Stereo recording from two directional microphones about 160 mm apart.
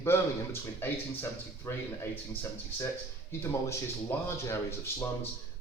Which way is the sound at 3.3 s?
15° left (ahead or behind).